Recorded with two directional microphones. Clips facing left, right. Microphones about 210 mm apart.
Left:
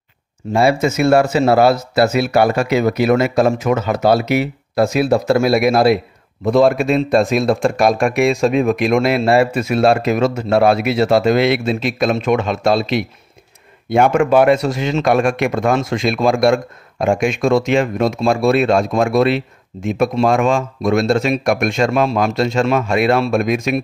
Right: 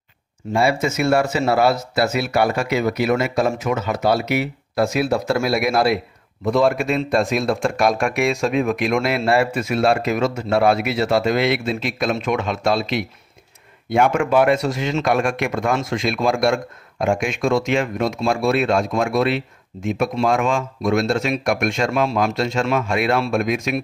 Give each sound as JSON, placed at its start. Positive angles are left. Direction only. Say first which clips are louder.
{"t": 0.5, "sound": "speech", "louder": "left 4 dB", "side_deg": 35}
{"t": 1.0, "sound": "speech", "louder": "left 5 dB", "side_deg": 55}
{"t": 2.1, "sound": "speech", "louder": "left 5 dB", "side_deg": 35}
{"t": 3.3, "sound": "speech", "louder": "left 5 dB", "side_deg": 55}
{"t": 4.3, "sound": "speech", "louder": "left 4 dB", "side_deg": 35}